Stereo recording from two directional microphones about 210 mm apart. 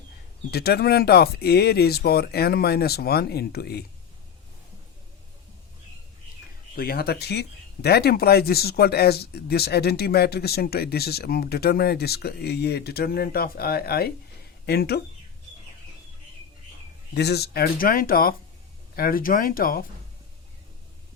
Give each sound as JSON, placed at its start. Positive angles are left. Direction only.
{"t": 0.5, "sound": "speech", "side_deg": 50}
{"t": 6.7, "sound": "speech", "side_deg": 45}
{"t": 17.2, "sound": "speech", "side_deg": 50}